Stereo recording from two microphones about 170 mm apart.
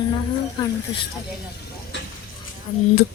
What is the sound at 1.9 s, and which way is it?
Speech, 90° left.